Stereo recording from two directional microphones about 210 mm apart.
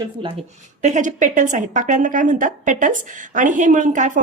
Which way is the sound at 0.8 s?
35° right (ahead or behind).